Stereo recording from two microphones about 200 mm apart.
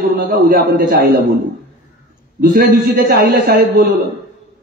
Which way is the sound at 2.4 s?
45° right (ahead or behind).